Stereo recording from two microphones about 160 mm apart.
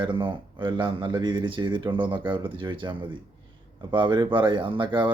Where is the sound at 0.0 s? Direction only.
30° right (ahead or behind).